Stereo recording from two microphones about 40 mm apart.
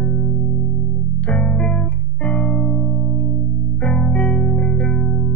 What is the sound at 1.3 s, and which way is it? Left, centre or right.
Music, left.